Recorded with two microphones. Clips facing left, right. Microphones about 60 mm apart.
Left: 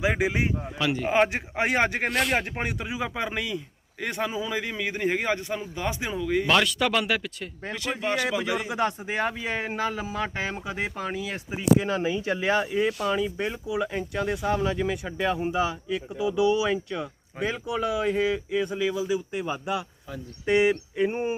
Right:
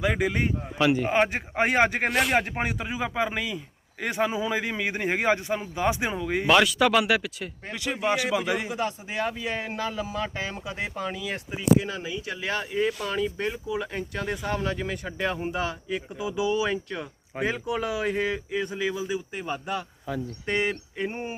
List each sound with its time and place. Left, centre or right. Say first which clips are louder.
0.0 s a sound: even; centre
0.9 s a man's voice: even; centre
8.0 s a man's voice: right 2 dB; centre
9.0 s speech: left 1 dB; left
12.7 s speech: left 2 dB; centre
20.5 s a sound: left 6 dB; centre